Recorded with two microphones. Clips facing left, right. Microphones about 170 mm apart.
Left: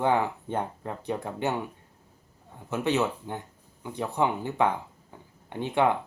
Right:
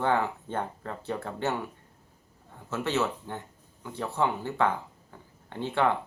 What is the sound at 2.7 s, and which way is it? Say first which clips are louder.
Speech: left 2 dB; 15° left (ahead or behind).